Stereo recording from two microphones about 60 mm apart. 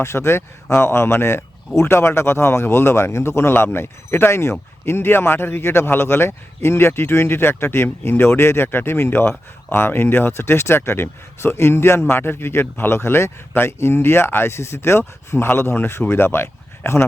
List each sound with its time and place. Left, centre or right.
0.0 s speech: left